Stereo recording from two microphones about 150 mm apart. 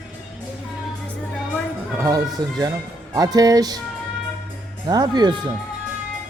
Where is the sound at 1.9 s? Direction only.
25° right (ahead or behind).